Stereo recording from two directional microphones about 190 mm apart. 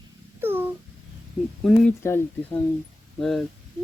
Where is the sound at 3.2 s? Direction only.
Centre (ahead or behind).